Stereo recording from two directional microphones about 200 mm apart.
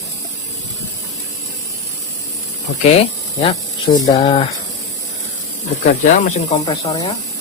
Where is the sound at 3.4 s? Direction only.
25° left (ahead or behind).